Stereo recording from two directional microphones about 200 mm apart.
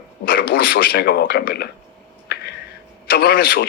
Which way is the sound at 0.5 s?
50° left (ahead or behind).